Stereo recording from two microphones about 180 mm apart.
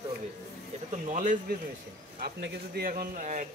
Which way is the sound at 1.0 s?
45° right (ahead or behind).